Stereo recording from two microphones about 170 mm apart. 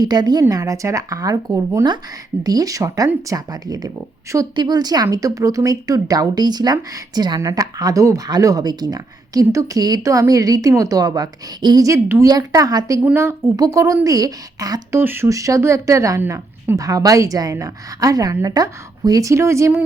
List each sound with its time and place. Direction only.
0.0 s speech: 25° right (ahead or behind)